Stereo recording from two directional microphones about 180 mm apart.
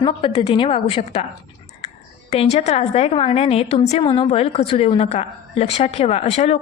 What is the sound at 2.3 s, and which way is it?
A woman's voice, 35° left (ahead or behind).